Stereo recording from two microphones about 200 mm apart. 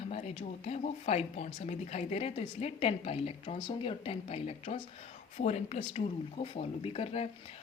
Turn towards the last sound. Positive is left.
turn(degrees=30)  # may be behind; listen again after turning